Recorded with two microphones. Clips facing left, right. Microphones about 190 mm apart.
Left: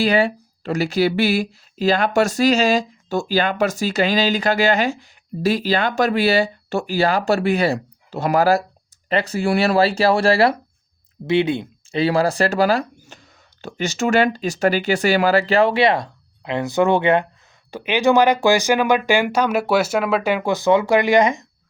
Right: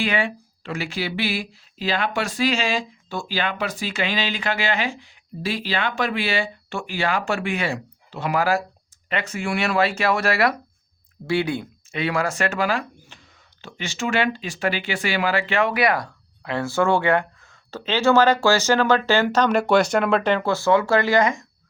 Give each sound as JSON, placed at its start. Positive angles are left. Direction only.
{"t": 0.0, "sound": "speech", "side_deg": 40}